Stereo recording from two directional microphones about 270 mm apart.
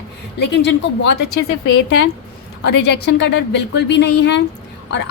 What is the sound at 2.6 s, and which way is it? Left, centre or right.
A woman's voice, left.